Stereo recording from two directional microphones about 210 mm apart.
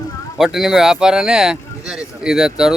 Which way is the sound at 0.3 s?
Centre (ahead or behind).